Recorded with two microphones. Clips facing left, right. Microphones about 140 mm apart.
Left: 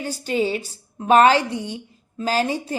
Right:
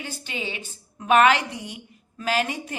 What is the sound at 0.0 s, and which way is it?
A woman's voice, 40° left (ahead or behind).